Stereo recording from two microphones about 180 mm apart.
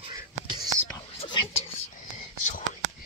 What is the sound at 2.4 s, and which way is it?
Whispering, 45° left (ahead or behind).